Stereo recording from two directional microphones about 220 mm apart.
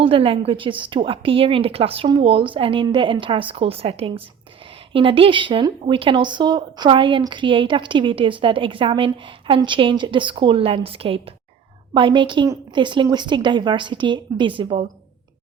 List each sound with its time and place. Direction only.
0.0 s a woman's voice: 25° right (ahead or behind)